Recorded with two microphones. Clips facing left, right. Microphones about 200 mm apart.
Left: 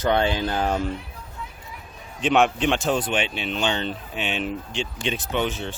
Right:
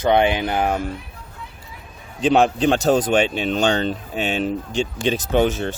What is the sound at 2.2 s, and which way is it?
Speech, 35° right (ahead or behind).